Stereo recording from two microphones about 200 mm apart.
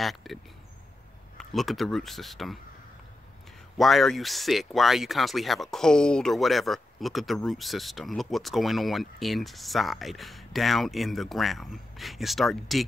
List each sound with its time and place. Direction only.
0.0 s speech: centre (ahead or behind)
1.4 s speech: centre (ahead or behind)
3.7 s speech: centre (ahead or behind)